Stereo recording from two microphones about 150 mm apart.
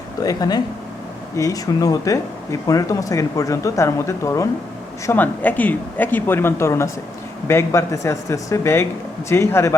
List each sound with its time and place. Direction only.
0.2 s speech: 25° left (ahead or behind)